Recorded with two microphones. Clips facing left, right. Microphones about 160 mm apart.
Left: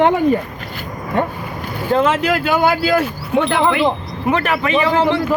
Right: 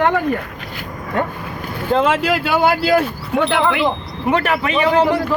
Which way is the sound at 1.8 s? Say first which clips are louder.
Left 1 dB; centre (ahead or behind).